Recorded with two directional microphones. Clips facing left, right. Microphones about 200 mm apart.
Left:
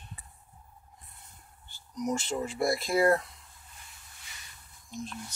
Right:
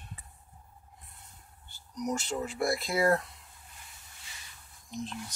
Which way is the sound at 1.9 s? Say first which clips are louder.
Left 2 dB; 5° left (ahead or behind).